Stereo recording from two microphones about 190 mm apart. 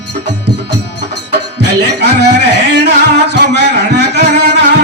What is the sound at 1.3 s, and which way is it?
Music, 60° right (ahead or behind).